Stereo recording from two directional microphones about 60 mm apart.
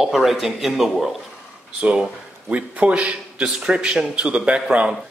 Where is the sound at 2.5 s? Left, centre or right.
Right.